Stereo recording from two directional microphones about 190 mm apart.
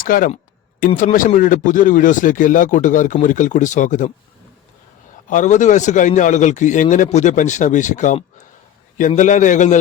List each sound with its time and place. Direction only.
0.0 s speech: 50° left (ahead or behind)
5.3 s a man's voice: 40° left (ahead or behind)